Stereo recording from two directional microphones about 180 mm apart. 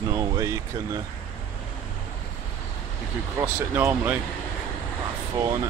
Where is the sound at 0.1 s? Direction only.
15° right (ahead or behind).